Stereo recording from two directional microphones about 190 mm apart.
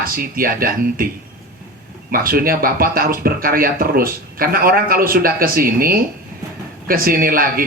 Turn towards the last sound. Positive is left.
turn(degrees=-50)  # may be behind; listen again after turning